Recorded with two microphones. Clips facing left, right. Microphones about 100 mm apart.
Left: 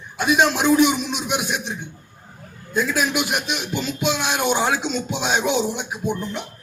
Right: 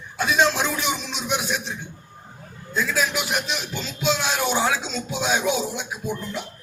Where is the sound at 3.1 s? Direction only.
60° left (ahead or behind).